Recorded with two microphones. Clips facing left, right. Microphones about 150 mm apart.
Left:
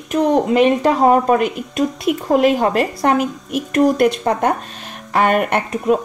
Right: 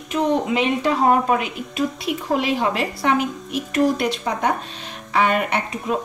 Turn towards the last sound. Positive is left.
turn(degrees=50)  # may be behind; listen again after turning